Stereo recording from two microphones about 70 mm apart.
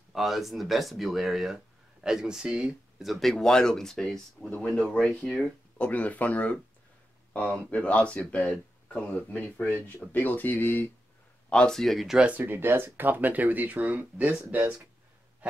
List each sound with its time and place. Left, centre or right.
0.1 s speech: centre
3.0 s speech: centre
5.4 s speech: centre
11.5 s speech: centre
12.2 s speech: right